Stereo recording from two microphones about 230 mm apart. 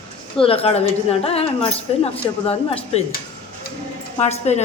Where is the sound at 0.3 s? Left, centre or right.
Left.